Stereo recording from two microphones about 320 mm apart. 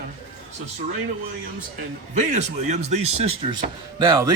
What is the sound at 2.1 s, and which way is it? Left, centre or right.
Speech, right.